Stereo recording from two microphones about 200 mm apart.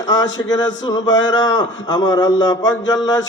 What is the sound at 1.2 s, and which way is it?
A man's voice, 20° left (ahead or behind).